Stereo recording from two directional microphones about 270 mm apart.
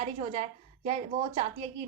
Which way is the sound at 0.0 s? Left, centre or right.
Right.